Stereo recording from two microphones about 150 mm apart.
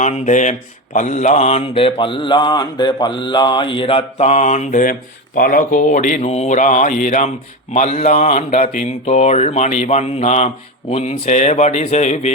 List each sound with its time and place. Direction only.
0.0 s speech: 55° left (ahead or behind)
0.9 s mantra: 55° left (ahead or behind)
8.2 s mantra: 45° left (ahead or behind)